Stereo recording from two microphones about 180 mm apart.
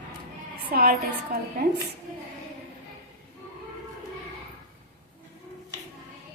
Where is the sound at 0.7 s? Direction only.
60° right (ahead or behind).